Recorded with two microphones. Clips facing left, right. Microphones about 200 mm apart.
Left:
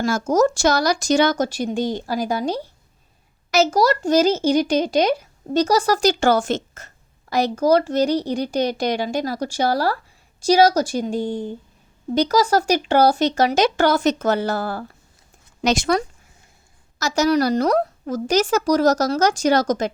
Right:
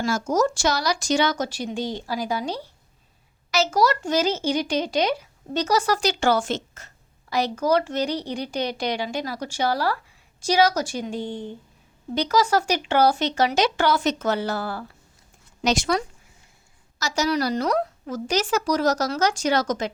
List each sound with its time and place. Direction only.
0.0 s a woman's voice: 45° left (ahead or behind)
15.6 s a woman's voice: 55° left (ahead or behind)